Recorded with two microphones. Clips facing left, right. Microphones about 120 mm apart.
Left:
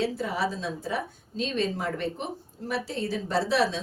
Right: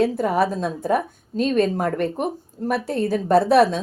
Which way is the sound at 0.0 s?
50° right (ahead or behind).